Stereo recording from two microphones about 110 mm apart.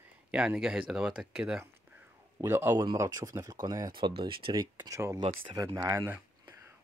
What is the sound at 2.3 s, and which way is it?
Speech, 25° right (ahead or behind).